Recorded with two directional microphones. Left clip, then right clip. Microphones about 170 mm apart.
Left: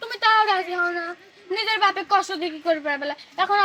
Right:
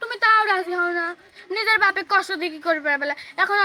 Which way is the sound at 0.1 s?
Centre (ahead or behind).